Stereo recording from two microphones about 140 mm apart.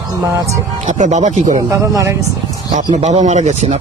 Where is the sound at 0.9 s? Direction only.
60° right (ahead or behind).